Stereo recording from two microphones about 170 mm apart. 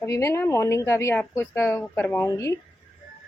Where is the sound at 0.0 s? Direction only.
15° left (ahead or behind).